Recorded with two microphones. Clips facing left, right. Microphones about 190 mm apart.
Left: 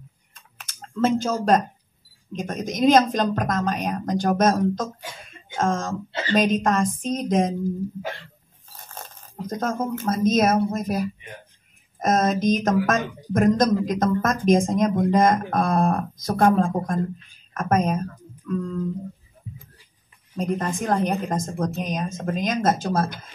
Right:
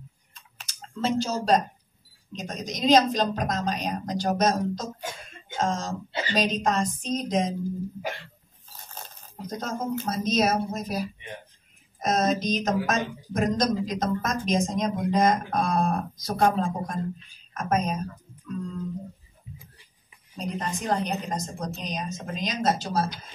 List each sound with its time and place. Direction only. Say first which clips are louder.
0.3 s typing: left 2 dB; 50° left (ahead or behind)
2.3 s speech: left 7 dB; 50° left (ahead or behind)
9.5 s speech: left 4 dB; 50° left (ahead or behind)
20.3 s speech: left 6 dB; 50° left (ahead or behind)